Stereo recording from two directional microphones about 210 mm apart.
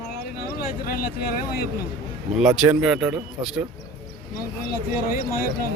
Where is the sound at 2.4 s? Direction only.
5° right (ahead or behind).